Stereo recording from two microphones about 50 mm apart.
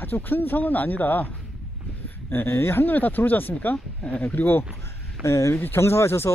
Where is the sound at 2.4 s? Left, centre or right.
Left.